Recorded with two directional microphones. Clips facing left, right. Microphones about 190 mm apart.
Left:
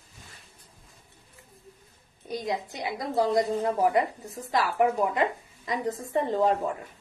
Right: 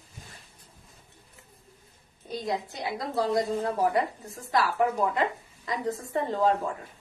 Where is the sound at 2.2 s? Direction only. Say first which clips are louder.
Even; 15° left (ahead or behind).